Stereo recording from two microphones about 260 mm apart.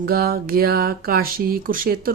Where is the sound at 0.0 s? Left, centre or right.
Right.